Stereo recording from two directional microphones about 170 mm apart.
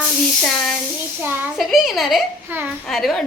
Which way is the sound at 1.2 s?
10° right (ahead or behind).